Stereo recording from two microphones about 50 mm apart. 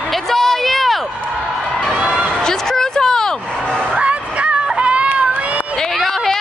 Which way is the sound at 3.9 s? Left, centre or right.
Right.